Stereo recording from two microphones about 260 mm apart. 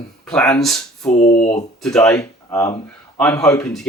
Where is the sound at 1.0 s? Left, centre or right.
Left.